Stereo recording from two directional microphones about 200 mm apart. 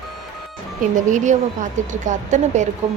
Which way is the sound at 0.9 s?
40° right (ahead or behind).